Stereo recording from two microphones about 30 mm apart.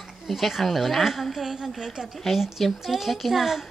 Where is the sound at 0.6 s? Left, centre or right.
Centre.